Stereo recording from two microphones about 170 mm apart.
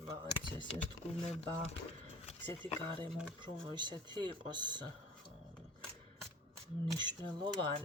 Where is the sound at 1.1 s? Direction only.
40° left (ahead or behind).